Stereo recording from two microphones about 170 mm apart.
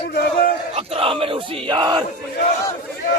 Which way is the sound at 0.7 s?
35° right (ahead or behind).